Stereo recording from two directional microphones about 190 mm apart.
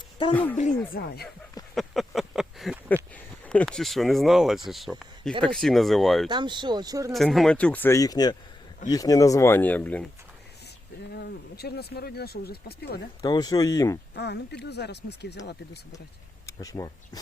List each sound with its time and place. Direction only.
0.3 s speech: 10° left (ahead or behind)
0.9 s speech: 55° left (ahead or behind)
1.7 s a sound: centre (ahead or behind)
2.9 s speech: 5° left (ahead or behind)
6.2 s speech: 25° right (ahead or behind)
7.1 s speech: centre (ahead or behind)
11.1 s speech: 60° left (ahead or behind)
13.2 s speech: 20° left (ahead or behind)
14.2 s speech: 60° left (ahead or behind)
16.5 s speech: 15° left (ahead or behind)